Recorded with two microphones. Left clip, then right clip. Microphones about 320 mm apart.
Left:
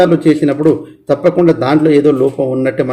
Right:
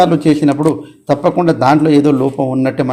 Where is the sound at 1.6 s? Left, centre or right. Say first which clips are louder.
Even; right.